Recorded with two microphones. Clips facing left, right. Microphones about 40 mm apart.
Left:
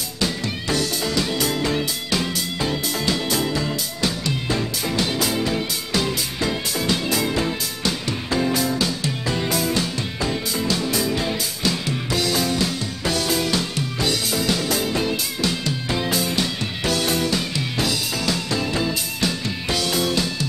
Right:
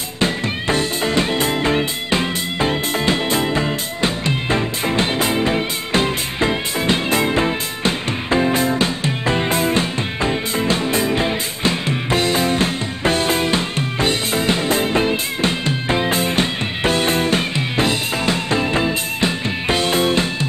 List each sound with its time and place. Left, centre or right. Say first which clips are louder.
0.2 s music: right 5 dB; right